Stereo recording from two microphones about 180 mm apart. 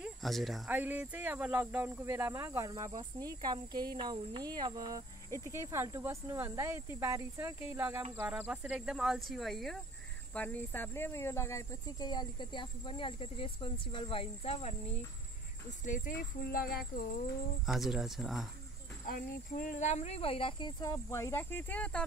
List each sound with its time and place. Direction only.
0.0 s speech: centre (ahead or behind); by 15.0 s 35° left (ahead or behind)
15.8 s speech: 45° left (ahead or behind)
17.6 s speech: centre (ahead or behind)
19.0 s speech: 55° left (ahead or behind); by 22.0 s 5° left (ahead or behind)